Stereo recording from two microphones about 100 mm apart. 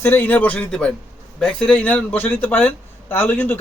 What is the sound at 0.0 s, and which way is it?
A man's voice, 20° left (ahead or behind).